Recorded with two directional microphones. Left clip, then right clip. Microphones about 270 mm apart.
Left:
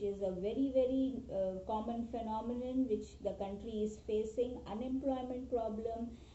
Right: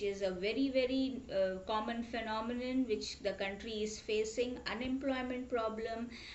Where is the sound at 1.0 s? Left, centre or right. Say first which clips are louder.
Right 2 dB; right.